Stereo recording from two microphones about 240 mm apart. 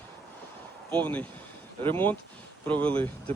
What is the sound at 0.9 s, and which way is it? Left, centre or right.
Speech, centre.